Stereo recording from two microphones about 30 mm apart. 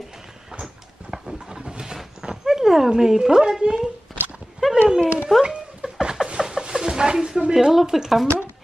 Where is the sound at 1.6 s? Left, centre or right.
Right.